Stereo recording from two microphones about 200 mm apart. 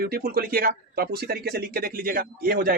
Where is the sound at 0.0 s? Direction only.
50° right (ahead or behind).